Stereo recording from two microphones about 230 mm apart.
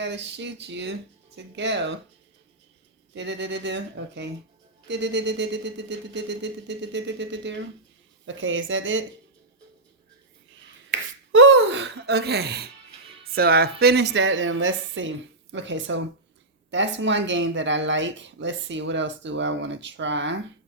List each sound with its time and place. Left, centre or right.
0.0 s speech: right
3.2 s speech: right
11.3 s speech: right